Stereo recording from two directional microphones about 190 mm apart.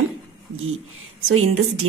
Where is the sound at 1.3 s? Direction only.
90° right.